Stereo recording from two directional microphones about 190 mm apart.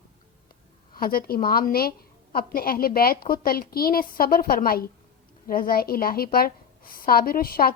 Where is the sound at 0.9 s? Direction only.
50° left (ahead or behind).